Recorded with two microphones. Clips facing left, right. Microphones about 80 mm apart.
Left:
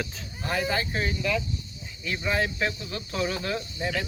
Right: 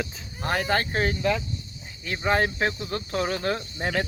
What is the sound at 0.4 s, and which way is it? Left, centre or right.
Speech, right.